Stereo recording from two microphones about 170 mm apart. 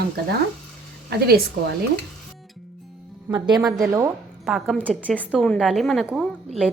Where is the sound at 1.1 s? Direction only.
70° right (ahead or behind).